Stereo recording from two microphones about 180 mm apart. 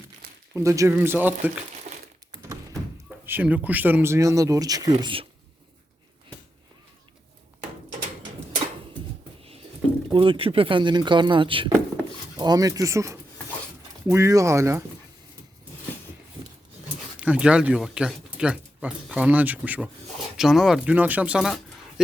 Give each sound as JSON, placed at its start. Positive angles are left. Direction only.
{"t": 0.5, "sound": "speech", "side_deg": -15}
{"t": 1.9, "sound": "crumpling", "side_deg": -40}
{"t": 3.2, "sound": "speech", "side_deg": -10}
{"t": 10.1, "sound": "speech", "side_deg": -30}
{"t": 17.2, "sound": "speech", "side_deg": -5}